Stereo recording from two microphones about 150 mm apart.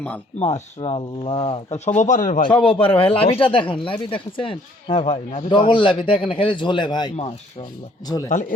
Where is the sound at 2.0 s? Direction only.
55° left (ahead or behind).